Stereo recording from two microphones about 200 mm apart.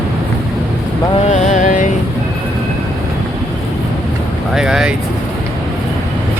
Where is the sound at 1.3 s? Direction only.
35° left (ahead or behind).